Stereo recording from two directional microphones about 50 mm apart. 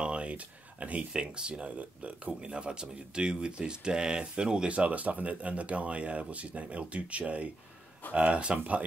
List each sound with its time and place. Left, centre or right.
0.0 s speech: right
4.7 s speech: right